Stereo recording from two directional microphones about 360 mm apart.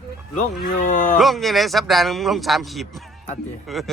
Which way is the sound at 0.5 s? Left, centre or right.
Left.